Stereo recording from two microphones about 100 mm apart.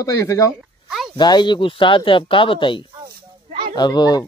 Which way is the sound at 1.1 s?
50° left (ahead or behind).